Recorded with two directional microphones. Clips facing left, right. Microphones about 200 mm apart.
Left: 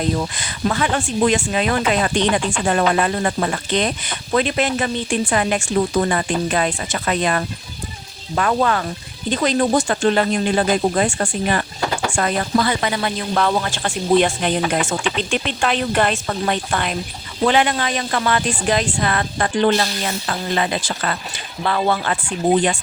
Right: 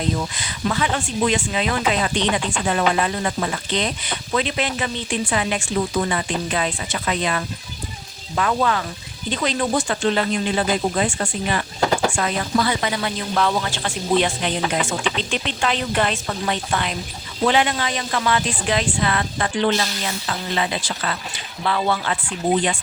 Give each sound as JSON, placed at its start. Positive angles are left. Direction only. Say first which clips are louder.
{"t": 0.3, "sound": "speech", "louder": "left 2 dB", "side_deg": 45}